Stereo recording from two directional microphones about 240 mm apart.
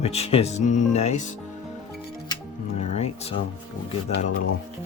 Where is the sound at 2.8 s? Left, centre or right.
Left.